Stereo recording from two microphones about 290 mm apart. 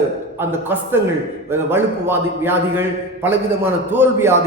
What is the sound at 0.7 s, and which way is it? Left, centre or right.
A man's voice, centre.